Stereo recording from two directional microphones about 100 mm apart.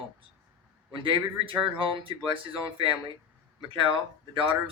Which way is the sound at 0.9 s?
55° right (ahead or behind).